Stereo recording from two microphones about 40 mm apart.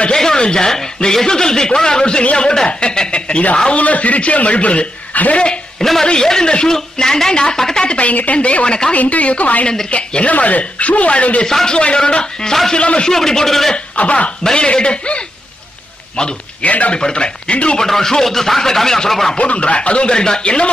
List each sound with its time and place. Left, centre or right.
0.1 s a man's voice: centre; by 5.4 s left
5.8 s a man's voice: centre
7.8 s speech: left
8.1 s a man's voice: left
11.4 s speech: centre
12.4 s speech: centre
12.7 s speech: left
13.1 s speech: centre
13.7 s a man's voice: left
14.4 s speech: centre
16.6 s a man's voice: left
16.9 s speech: left
17.7 s speech: centre
19.3 s speech: left